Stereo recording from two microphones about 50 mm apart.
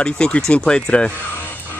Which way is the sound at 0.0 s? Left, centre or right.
Centre.